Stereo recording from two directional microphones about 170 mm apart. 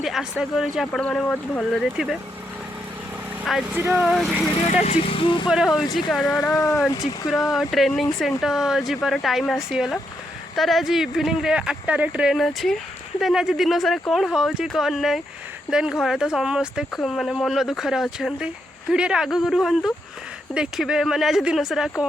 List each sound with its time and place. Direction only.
0.0 s speech: centre (ahead or behind)
3.4 s speech: centre (ahead or behind)
4.6 s speech: 40° left (ahead or behind)
5.5 s speech: centre (ahead or behind)
6.5 s speech: 20° left (ahead or behind)
7.3 s speech: centre (ahead or behind)